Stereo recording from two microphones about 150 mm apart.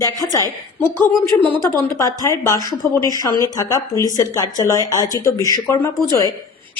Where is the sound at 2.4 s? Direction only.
20° left (ahead or behind).